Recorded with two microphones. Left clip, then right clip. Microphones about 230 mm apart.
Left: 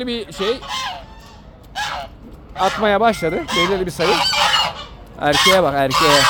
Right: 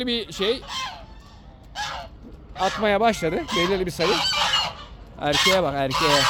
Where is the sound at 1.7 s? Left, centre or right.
Centre.